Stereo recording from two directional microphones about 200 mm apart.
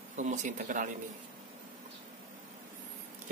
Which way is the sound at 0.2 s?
35° right (ahead or behind).